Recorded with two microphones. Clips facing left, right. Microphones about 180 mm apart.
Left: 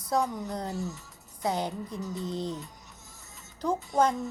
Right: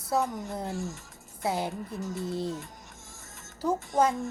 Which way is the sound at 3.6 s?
10° right (ahead or behind).